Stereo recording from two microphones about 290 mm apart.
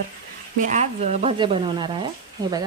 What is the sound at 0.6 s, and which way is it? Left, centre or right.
Speech, right.